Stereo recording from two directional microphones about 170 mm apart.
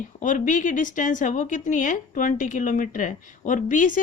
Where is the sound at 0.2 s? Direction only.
50° left (ahead or behind).